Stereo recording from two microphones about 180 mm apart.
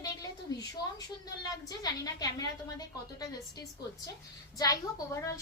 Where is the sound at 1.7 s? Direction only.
20° left (ahead or behind).